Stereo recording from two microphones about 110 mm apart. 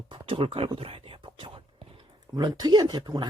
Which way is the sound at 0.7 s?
55° right (ahead or behind).